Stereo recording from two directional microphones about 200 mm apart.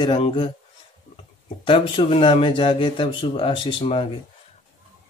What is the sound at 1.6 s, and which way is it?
Speech, 25° left (ahead or behind).